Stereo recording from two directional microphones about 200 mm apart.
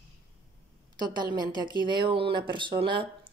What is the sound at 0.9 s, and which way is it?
A woman's voice, 20° right (ahead or behind).